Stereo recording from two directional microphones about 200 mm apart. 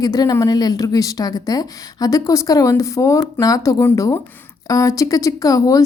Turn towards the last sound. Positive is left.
turn(degrees=15)  # may be behind; listen again after turning